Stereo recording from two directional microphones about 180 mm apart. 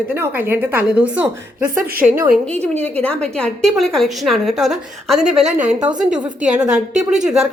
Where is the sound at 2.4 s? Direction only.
10° left (ahead or behind).